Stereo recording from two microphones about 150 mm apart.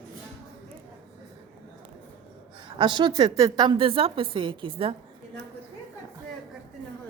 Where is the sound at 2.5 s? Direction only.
35° right (ahead or behind).